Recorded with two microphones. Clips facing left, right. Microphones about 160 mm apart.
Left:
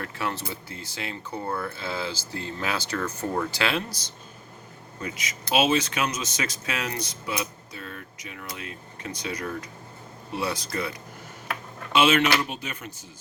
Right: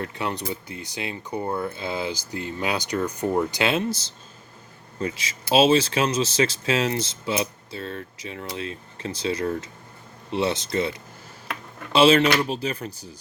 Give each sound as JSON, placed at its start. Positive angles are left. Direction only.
{"t": 0.0, "sound": "speech", "side_deg": -20}
{"t": 11.9, "sound": "speech", "side_deg": -35}